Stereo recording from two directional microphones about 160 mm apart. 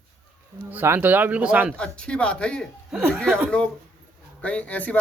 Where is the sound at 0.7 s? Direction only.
15° right (ahead or behind).